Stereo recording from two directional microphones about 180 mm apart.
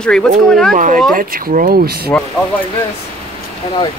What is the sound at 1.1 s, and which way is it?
Speech, 55° right (ahead or behind).